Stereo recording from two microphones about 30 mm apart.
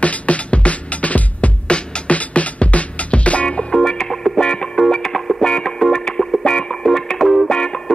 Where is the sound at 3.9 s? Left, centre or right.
Centre.